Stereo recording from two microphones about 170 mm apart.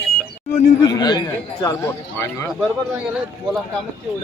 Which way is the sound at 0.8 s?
20° left (ahead or behind).